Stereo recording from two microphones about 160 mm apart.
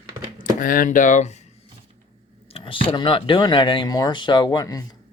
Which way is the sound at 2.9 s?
35° left (ahead or behind).